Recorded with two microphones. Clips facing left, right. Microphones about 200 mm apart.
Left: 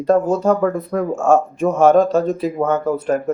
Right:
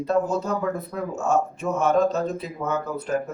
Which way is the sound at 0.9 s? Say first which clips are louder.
Left 9 dB; 50° left (ahead or behind).